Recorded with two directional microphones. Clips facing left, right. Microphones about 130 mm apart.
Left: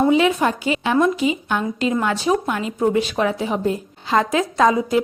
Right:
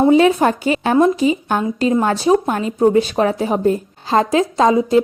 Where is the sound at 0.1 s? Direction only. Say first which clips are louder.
Right 5 dB; 40° right (ahead or behind).